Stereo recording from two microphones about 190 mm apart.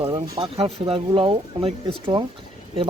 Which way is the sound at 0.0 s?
25° right (ahead or behind).